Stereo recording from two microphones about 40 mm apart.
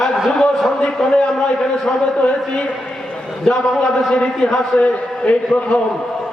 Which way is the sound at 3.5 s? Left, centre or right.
Centre.